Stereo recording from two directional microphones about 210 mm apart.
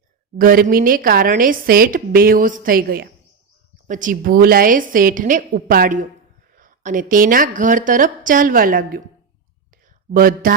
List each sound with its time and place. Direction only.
0.3 s a woman's voice: 40° right (ahead or behind)
10.1 s a woman's voice: 45° right (ahead or behind)